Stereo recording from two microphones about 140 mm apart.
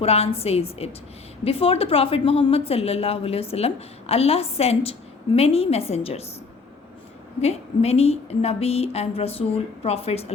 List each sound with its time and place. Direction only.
0.0 s a woman's voice: 45° left (ahead or behind)
7.4 s a woman's voice: 45° left (ahead or behind)